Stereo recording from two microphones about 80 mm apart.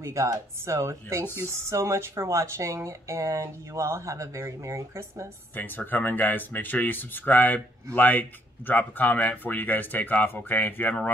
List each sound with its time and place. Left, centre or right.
0.0 s speech: right
5.6 s speech: left